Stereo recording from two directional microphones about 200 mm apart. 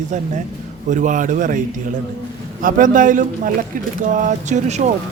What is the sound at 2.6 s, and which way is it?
Speech, 40° right (ahead or behind).